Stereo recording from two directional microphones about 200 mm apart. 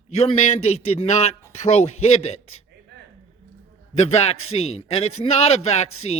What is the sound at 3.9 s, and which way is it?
A man's voice, 30° left (ahead or behind).